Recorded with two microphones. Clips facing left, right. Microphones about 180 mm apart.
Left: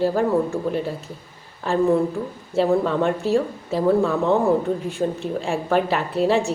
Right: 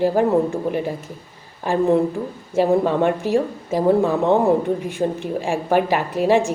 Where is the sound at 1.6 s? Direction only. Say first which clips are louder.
Right 1 dB; 20° right (ahead or behind).